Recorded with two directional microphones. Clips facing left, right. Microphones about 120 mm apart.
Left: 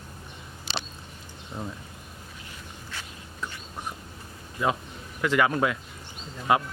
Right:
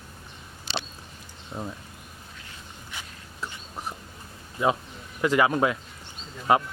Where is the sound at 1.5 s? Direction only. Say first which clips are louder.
Right 1 dB; 10° right (ahead or behind).